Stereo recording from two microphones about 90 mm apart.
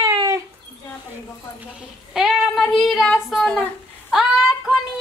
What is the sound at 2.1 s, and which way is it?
Child singing, 5° right (ahead or behind).